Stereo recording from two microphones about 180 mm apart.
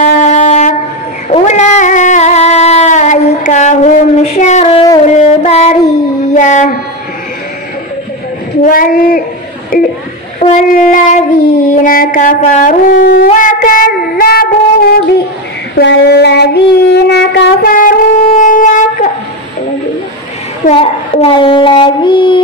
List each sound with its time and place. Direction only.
0.2 s wind instrument: 40° left (ahead or behind)
1.3 s a sound: 40° left (ahead or behind)
5.1 s music: 40° left (ahead or behind)
6.3 s mantra: 45° left (ahead or behind)
8.6 s child singing: 50° left (ahead or behind)
9.7 s a sound: 50° left (ahead or behind)
13.3 s child singing: 45° left (ahead or behind)
15.8 s child singing: 70° left (ahead or behind)
17.6 s music: 50° left (ahead or behind)
18.4 s wind instrument: 45° left (ahead or behind)
20.7 s child singing: 30° left (ahead or behind)